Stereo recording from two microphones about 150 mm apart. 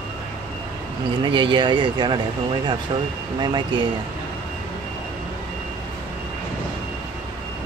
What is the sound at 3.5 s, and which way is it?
Speech, 35° right (ahead or behind).